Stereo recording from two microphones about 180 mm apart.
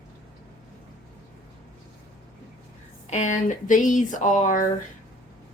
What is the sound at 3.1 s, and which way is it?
Speech, 40° left (ahead or behind).